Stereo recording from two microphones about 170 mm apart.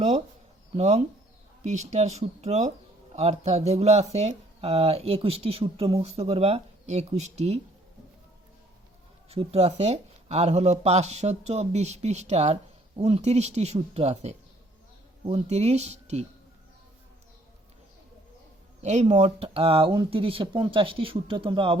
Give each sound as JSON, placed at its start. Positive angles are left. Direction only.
{"t": 0.8, "sound": "speech", "side_deg": -40}
{"t": 9.3, "sound": "speech", "side_deg": -35}
{"t": 18.8, "sound": "speech", "side_deg": -40}